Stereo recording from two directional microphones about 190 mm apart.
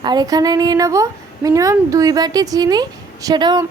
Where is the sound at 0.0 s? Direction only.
20° right (ahead or behind).